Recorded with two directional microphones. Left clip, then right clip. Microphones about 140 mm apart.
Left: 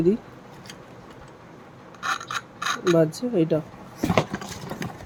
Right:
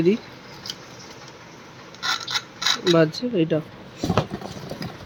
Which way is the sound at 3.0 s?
Centre (ahead or behind).